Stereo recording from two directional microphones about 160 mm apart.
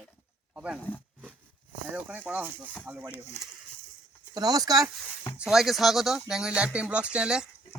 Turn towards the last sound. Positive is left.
turn(degrees=-5)  # may be behind; listen again after turning